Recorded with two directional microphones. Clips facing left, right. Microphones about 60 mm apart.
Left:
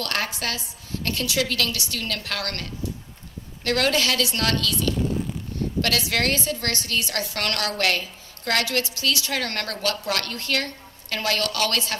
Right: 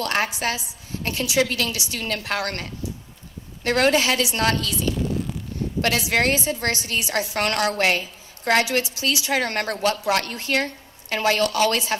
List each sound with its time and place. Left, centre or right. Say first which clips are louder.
0.0 s a woman's voice: right 4 dB; right